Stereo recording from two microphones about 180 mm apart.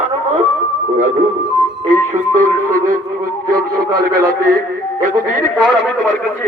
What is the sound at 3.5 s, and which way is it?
Speech, 55° right (ahead or behind).